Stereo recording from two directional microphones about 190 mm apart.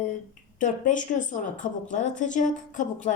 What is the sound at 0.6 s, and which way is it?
A woman's voice, 40° left (ahead or behind).